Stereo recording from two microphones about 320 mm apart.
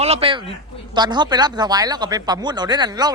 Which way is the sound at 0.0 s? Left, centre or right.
Centre.